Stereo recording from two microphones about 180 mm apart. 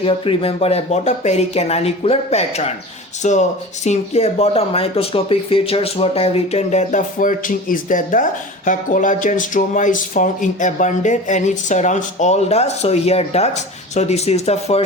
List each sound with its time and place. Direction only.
0.0 s speech: 30° left (ahead or behind)